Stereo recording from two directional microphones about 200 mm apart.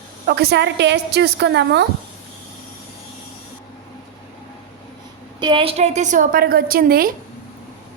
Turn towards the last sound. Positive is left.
turn(degrees=-50)  # may be behind; listen again after turning